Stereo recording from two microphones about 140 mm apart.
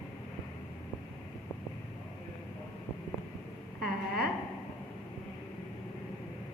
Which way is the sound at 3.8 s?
90° right.